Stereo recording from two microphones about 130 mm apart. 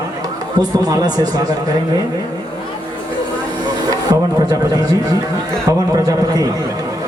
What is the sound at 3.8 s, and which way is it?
A man's voice, 30° right (ahead or behind).